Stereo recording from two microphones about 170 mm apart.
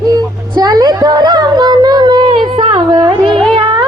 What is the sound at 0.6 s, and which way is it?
Speech, 25° right (ahead or behind).